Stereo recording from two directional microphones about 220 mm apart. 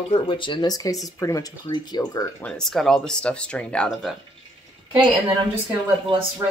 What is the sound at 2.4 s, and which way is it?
Speech, centre (ahead or behind).